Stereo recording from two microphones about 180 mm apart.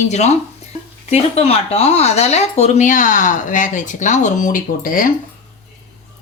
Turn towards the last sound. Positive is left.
turn(degrees=50)  # may be behind; listen again after turning